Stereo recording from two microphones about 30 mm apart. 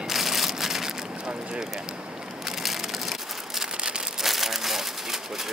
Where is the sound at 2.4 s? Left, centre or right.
Centre.